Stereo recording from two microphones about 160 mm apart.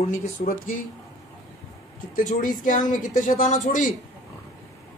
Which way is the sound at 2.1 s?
60° left (ahead or behind).